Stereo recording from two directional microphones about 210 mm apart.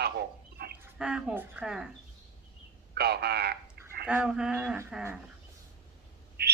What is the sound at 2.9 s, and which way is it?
Speech, 50° right (ahead or behind).